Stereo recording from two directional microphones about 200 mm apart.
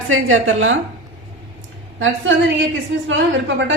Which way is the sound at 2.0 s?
75° right (ahead or behind).